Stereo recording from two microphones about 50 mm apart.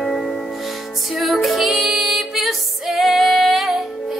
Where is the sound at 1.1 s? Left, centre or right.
Centre.